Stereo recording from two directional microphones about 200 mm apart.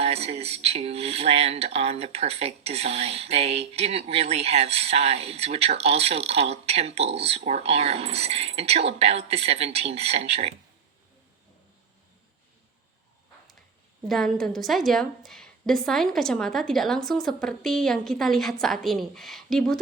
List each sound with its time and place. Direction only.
0.0 s speech: 30° right (ahead or behind)
14.1 s a woman's voice: centre (ahead or behind)